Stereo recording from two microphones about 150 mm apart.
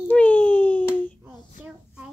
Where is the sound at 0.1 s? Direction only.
10° left (ahead or behind).